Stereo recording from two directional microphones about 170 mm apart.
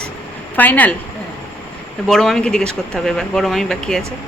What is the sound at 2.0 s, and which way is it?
Speech, centre (ahead or behind).